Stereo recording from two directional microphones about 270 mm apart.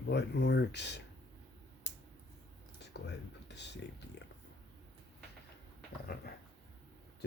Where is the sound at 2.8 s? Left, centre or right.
Left.